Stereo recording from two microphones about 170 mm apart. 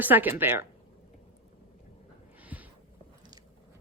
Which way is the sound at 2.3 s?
10° right (ahead or behind).